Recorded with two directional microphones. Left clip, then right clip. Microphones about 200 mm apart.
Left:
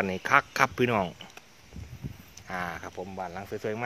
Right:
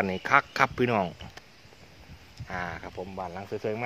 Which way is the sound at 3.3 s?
5° left (ahead or behind).